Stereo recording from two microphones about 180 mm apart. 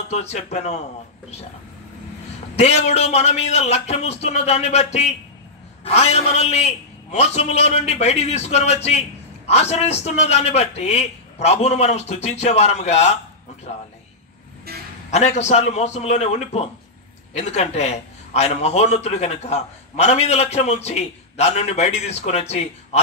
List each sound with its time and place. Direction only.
0.1 s a man's voice: 35° left (ahead or behind)
2.5 s a man's voice: 35° left (ahead or behind)
14.7 s a sound: 60° right (ahead or behind)
15.0 s a man's voice: 40° left (ahead or behind)